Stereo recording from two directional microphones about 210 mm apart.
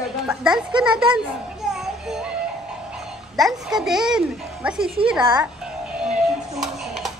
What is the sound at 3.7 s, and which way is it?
A child's voice, centre (ahead or behind).